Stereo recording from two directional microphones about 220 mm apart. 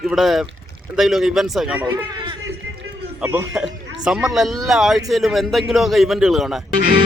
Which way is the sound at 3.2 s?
10° right (ahead or behind).